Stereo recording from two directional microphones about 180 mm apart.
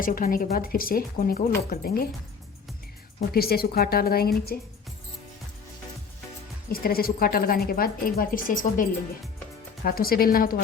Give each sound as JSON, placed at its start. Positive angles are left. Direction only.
{"t": 0.0, "sound": "a woman's voice", "side_deg": 50}
{"t": 3.2, "sound": "a woman's voice", "side_deg": 60}
{"t": 6.7, "sound": "a woman's voice", "side_deg": 55}